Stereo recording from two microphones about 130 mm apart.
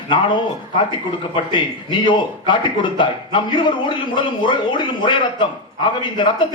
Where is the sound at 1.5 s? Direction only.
35° left (ahead or behind).